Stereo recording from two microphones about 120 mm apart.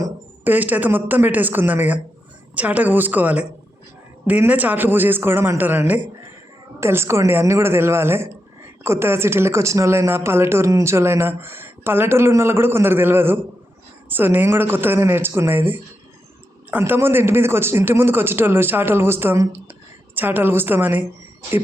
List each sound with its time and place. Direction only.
0.0 s a man's voice: 15° right (ahead or behind)